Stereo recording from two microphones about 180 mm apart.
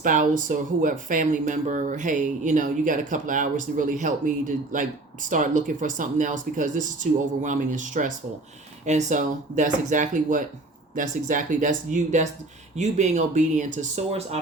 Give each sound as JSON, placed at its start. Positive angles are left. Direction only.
{"t": 0.0, "sound": "speech", "side_deg": -45}